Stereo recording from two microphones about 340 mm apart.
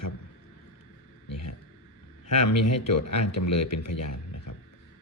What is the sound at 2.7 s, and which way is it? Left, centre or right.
A man's voice, left.